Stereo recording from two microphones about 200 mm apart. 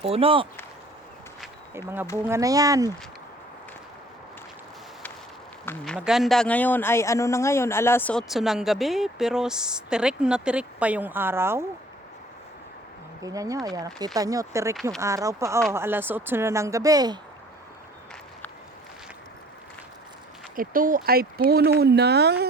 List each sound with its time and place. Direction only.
0.0 s speech: 30° right (ahead or behind)
2.1 s speech: 15° right (ahead or behind)
5.6 s speech: 5° left (ahead or behind); by 11.6 s 10° right (ahead or behind)
13.2 s speech: 15° right (ahead or behind)
20.6 s speech: 45° right (ahead or behind)